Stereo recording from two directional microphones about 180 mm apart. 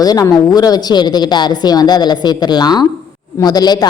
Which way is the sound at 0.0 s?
20° left (ahead or behind).